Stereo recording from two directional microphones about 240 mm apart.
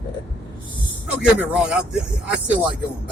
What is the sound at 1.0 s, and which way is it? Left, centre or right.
Speech, centre.